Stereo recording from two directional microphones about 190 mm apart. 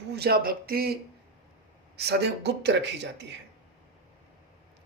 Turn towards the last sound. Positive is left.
turn(degrees=-65)  # may be behind; listen again after turning